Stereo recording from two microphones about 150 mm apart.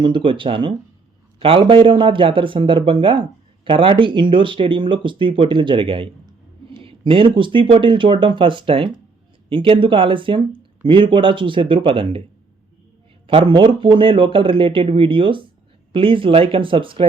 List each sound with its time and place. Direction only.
0.0 s speech: 35° right (ahead or behind)
13.2 s speech: 35° right (ahead or behind)